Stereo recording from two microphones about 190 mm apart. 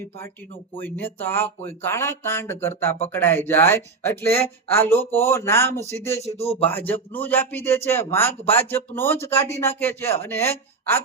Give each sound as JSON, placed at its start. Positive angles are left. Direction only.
{"t": 0.7, "sound": "speech", "side_deg": 10}
{"t": 6.2, "sound": "speech", "side_deg": 30}
{"t": 6.7, "sound": "speech", "side_deg": 10}